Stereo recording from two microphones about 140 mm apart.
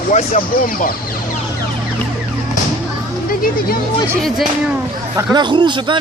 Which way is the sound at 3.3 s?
90° left.